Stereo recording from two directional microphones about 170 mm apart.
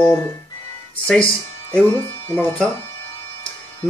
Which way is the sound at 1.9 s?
15° left (ahead or behind).